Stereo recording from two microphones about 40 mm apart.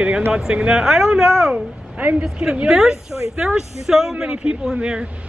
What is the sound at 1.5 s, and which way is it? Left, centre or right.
Speech, right.